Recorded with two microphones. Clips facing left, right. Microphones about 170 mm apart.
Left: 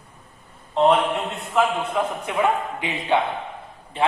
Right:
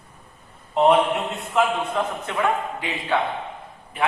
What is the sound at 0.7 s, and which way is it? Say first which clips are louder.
Speech: right 1 dB; centre (ahead or behind).